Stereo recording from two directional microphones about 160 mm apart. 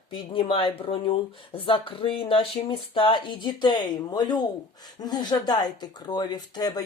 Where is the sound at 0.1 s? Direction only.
35° left (ahead or behind).